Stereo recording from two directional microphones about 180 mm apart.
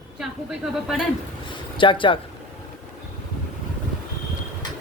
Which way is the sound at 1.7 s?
25° left (ahead or behind).